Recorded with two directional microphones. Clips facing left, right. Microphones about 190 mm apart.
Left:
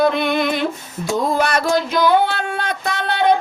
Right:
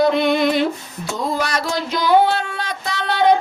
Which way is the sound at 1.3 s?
55° left (ahead or behind).